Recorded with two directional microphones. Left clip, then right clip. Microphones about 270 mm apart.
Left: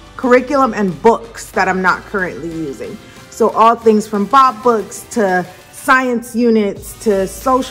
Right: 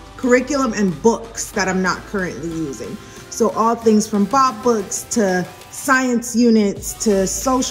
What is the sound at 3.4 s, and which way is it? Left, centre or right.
Speech, centre.